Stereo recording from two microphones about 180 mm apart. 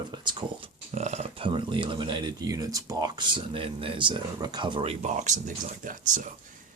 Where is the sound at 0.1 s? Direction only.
25° right (ahead or behind).